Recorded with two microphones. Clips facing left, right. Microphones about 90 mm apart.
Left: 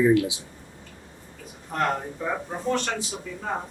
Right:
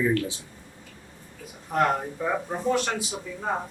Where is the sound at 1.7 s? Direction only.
5° right (ahead or behind).